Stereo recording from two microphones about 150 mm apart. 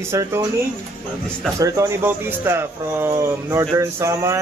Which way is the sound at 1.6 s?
20° right (ahead or behind).